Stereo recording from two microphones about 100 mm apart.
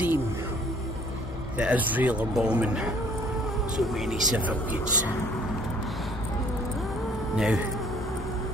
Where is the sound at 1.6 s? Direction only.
15° right (ahead or behind).